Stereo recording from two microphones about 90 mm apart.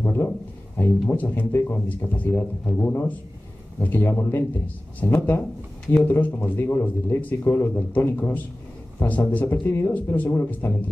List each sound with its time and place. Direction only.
0.7 s speech: 20° left (ahead or behind)